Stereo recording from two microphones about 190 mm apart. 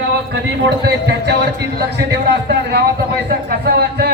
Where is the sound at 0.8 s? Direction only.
60° right (ahead or behind).